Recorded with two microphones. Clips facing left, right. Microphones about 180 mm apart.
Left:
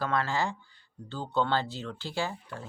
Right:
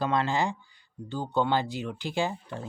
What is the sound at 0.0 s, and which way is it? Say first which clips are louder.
Speech: right 3 dB; 20° right (ahead or behind).